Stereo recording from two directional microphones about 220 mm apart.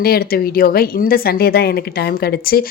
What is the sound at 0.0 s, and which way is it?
A woman's voice, 45° left (ahead or behind).